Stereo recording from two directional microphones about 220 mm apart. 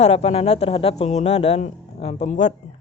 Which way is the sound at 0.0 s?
30° left (ahead or behind).